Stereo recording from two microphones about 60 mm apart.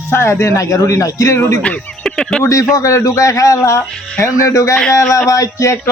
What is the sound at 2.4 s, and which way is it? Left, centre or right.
Speech, left.